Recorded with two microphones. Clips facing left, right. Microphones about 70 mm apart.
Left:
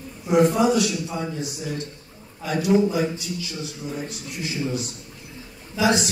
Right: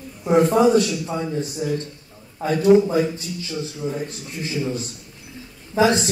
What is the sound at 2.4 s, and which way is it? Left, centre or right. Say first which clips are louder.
Speech: right 5 dB; right.